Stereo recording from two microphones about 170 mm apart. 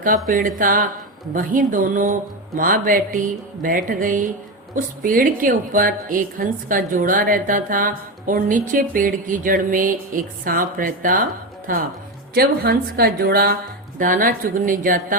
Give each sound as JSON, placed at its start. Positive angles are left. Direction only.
{"t": 0.3, "sound": "a woman's voice", "side_deg": -55}
{"t": 12.3, "sound": "a woman's voice", "side_deg": -65}